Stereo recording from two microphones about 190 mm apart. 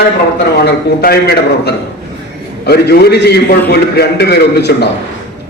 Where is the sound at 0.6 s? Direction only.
55° left (ahead or behind).